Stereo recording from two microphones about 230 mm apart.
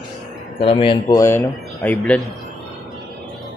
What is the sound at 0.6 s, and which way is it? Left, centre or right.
Speech, left.